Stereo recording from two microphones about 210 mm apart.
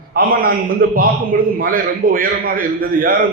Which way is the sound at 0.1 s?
45° right (ahead or behind).